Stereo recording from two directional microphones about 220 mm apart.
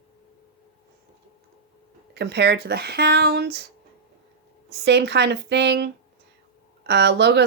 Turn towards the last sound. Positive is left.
turn(degrees=-50)  # may be behind; listen again after turning